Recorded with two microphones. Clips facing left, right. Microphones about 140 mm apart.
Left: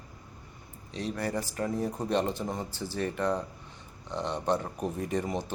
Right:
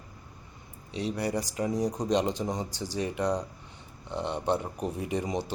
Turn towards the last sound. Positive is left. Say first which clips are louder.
# even
turn(degrees=-15)  # may be behind; listen again after turning